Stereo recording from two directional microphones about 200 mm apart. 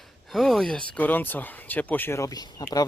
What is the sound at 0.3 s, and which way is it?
Speech, centre (ahead or behind).